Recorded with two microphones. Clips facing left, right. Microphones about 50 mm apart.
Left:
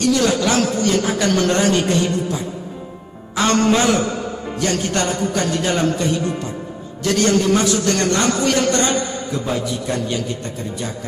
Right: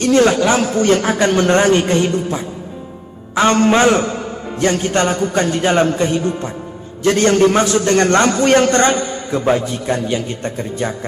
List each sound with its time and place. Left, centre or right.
0.0 s a man's voice: right
0.8 s a man's voice: right